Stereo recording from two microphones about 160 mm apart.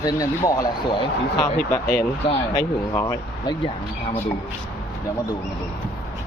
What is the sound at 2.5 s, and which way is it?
Speech, 20° left (ahead or behind).